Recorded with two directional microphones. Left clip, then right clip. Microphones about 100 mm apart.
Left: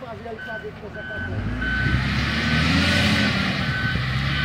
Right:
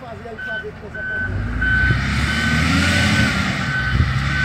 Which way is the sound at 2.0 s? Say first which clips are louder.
Right 4 dB; 20° left (ahead or behind).